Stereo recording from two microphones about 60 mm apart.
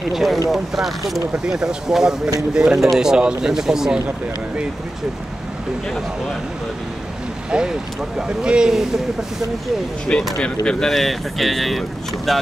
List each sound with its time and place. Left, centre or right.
0.1 s speech: centre
1.3 s speech: centre
7.5 s speech: centre
10.1 s speech: centre
10.9 s speech: centre